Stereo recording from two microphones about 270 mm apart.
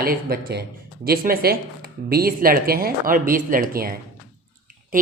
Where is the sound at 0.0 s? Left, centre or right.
Right.